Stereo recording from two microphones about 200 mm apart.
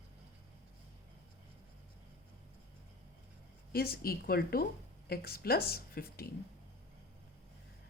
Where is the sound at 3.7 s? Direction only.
50° left (ahead or behind).